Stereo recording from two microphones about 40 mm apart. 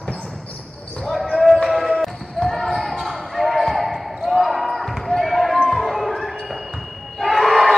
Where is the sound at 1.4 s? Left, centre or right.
Centre.